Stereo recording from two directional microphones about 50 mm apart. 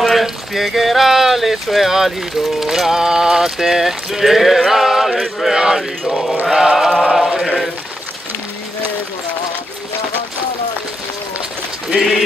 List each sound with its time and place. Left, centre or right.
0.0 s speech: centre
2.6 s music: centre
5.4 s mantra: centre
5.8 s music: centre
6.5 s mantra: centre
7.0 s music: centre